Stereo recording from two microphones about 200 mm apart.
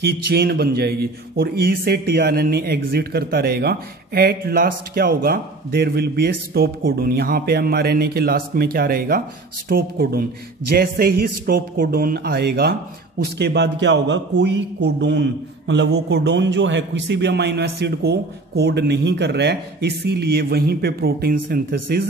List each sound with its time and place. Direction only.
0.0 s a man's voice: 50° right (ahead or behind)